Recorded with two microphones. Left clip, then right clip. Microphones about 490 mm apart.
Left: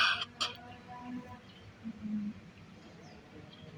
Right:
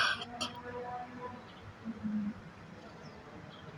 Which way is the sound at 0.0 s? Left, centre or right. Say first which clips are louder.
Left 2 dB; left.